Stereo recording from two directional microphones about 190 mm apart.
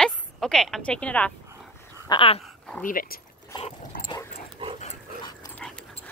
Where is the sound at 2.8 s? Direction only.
50° left (ahead or behind).